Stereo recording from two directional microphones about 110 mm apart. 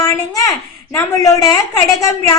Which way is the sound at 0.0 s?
35° left (ahead or behind).